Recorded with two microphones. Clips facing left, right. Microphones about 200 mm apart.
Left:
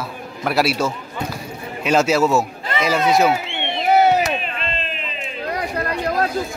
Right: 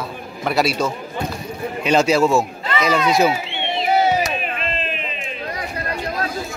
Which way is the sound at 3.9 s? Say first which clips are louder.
Left 3 dB; 60° left (ahead or behind).